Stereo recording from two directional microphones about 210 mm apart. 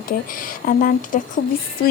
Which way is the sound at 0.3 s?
40° left (ahead or behind).